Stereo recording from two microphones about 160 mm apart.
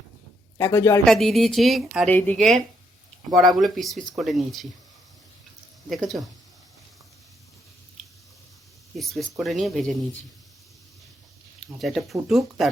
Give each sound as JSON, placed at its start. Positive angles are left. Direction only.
{"t": 0.6, "sound": "speech", "side_deg": 15}
{"t": 1.0, "sound": "speech", "side_deg": 0}
{"t": 2.0, "sound": "speech", "side_deg": 10}
{"t": 2.4, "sound": "speech", "side_deg": 0}
{"t": 5.9, "sound": "speech", "side_deg": 0}
{"t": 9.4, "sound": "speech", "side_deg": 0}
{"t": 11.6, "sound": "speech", "side_deg": 0}